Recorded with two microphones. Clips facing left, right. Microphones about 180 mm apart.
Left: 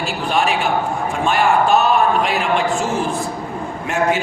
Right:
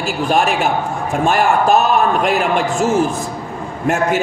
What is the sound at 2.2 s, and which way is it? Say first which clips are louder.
A man's voice: right 2 dB; 45° right (ahead or behind).